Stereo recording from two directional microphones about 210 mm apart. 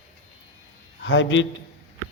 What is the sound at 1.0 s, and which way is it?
Speech, 60° left (ahead or behind).